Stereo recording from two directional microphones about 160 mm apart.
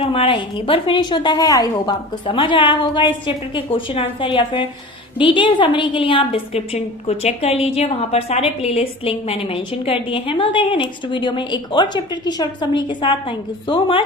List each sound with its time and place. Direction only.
0.0 s a woman's voice: 35° left (ahead or behind)